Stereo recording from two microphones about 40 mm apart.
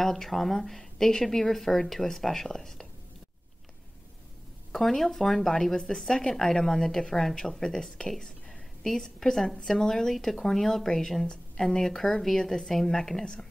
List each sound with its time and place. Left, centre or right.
0.0 s a woman's voice: centre
4.7 s a woman's voice: centre
10.1 s a woman's voice: centre
13.2 s speech: left